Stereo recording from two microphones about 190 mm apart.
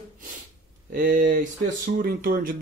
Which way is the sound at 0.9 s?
50° right (ahead or behind).